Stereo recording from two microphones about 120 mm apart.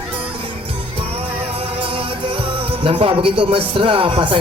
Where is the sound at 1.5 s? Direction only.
50° right (ahead or behind).